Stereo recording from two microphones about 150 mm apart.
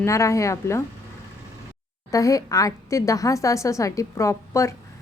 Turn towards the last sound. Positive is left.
turn(degrees=20)  # may be behind; listen again after turning